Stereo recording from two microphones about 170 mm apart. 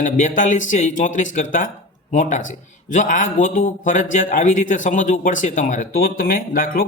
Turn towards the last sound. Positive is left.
turn(degrees=55)  # may be behind; listen again after turning